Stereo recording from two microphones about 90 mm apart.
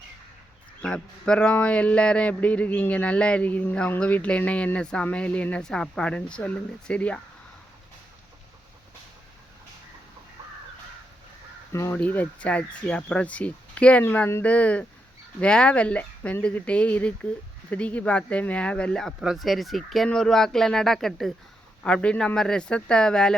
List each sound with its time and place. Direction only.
0.8 s speech: 15° left (ahead or behind)
11.7 s speech: 30° left (ahead or behind)
11.9 s speech: 20° left (ahead or behind)
19.2 s speech: 5° right (ahead or behind)